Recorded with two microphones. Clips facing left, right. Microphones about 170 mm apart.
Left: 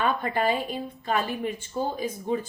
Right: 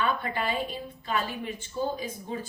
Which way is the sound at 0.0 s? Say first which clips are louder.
Left 4 dB; 45° left (ahead or behind).